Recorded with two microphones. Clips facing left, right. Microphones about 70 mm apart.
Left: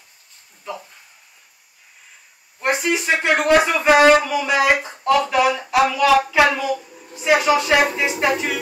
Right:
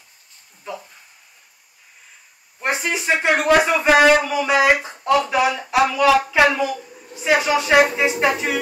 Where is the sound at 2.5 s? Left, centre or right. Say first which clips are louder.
Left 2 dB; centre.